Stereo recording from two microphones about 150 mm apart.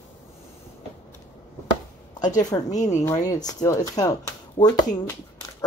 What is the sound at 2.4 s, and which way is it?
Speech, 25° left (ahead or behind).